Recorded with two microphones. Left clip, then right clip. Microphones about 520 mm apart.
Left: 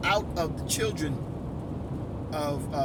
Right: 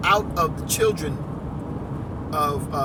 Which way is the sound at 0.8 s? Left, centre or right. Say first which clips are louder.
Right 11 dB; left.